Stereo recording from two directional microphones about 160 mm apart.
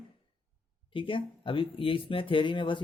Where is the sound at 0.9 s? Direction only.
30° left (ahead or behind).